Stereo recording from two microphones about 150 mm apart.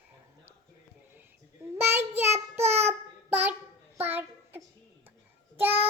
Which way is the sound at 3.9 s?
10° right (ahead or behind).